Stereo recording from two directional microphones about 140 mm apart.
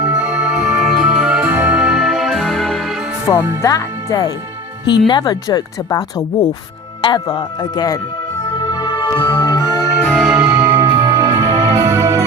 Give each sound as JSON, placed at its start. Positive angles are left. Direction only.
{"t": 0.1, "sound": "music", "side_deg": -10}
{"t": 3.3, "sound": "speech", "side_deg": 25}
{"t": 8.7, "sound": "music", "side_deg": 30}
{"t": 10.0, "sound": "music", "side_deg": 10}
{"t": 10.2, "sound": "music", "side_deg": -10}
{"t": 10.8, "sound": "music", "side_deg": -25}
{"t": 11.9, "sound": "music", "side_deg": -20}